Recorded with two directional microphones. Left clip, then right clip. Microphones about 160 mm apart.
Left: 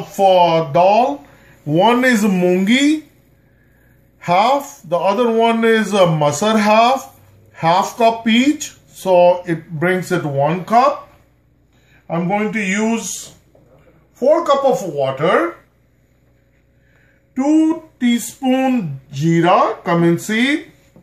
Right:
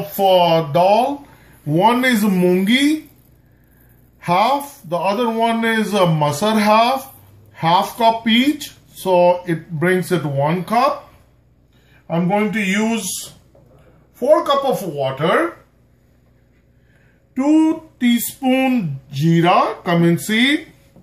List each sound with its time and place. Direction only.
0.1 s speech: centre (ahead or behind)
1.7 s speech: 20° left (ahead or behind)
4.2 s speech: 20° left (ahead or behind)
12.1 s speech: centre (ahead or behind)
14.1 s a sound: 15° left (ahead or behind)
17.3 s a sound: 10° left (ahead or behind)